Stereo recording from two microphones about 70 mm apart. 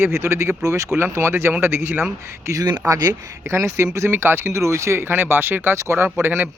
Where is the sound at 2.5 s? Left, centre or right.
Right.